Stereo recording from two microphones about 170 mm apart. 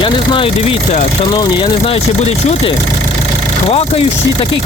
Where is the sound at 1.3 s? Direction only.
25° left (ahead or behind).